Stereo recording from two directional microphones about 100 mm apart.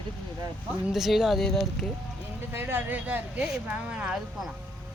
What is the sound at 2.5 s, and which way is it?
Speech, 25° right (ahead or behind).